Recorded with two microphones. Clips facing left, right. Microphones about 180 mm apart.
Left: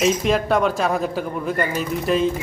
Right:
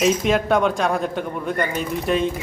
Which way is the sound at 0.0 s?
Centre (ahead or behind).